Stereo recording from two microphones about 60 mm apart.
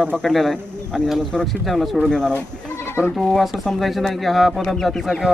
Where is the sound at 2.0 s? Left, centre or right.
Centre.